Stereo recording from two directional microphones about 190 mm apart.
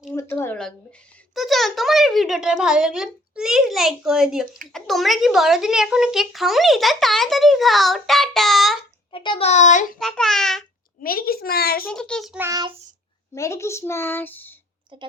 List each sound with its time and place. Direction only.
0.1 s a woman's voice: 10° left (ahead or behind)
9.1 s a woman's voice: 25° left (ahead or behind)
10.0 s speech: 5° left (ahead or behind)
11.0 s a child's voice: 50° left (ahead or behind)
11.9 s speech: 5° left (ahead or behind)
12.4 s child singing: 20° right (ahead or behind)
13.3 s speech: 15° left (ahead or behind)